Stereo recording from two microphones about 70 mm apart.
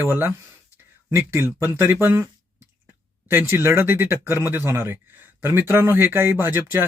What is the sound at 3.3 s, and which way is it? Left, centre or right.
Speech, right.